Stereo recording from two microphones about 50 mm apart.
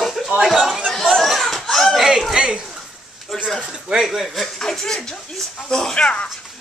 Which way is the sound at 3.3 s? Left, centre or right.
Centre.